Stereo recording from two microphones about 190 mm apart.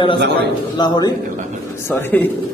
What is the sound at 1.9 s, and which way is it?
Speech, 10° left (ahead or behind).